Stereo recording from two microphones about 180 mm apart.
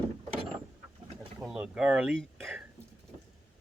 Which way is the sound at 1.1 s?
5° right (ahead or behind).